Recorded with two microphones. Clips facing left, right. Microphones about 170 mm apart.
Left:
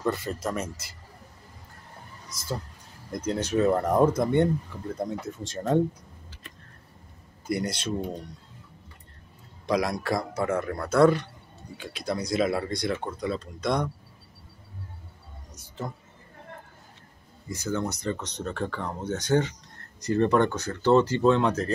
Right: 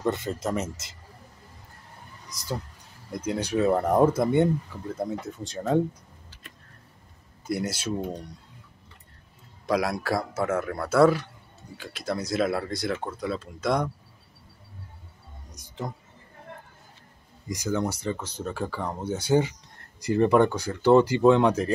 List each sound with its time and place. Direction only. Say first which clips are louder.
0.0 s speech: right 1 dB; 25° right (ahead or behind)
2.3 s speech: right 1 dB; 15° right (ahead or behind); by 5.8 s centre (ahead or behind)
7.4 s speech: even; 5° right (ahead or behind)
9.7 s speech: even; 5° right (ahead or behind)
15.5 s a sound: right 1 dB; 15° right (ahead or behind)
17.5 s speech: right 2 dB; 10° right (ahead or behind)